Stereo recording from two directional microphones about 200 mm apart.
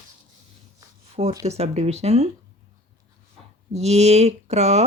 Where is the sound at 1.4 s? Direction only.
35° right (ahead or behind).